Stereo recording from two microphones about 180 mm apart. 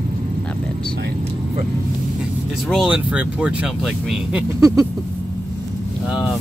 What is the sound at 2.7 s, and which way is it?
Speech, 5° right (ahead or behind).